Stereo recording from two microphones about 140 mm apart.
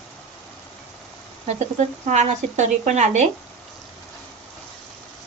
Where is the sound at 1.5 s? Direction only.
55° right (ahead or behind).